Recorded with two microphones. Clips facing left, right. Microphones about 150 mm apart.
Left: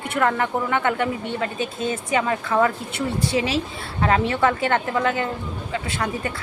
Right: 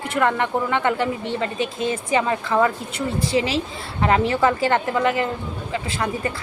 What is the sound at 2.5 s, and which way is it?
Speech, centre (ahead or behind).